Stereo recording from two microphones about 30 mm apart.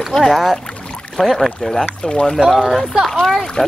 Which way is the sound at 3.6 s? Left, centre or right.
Left.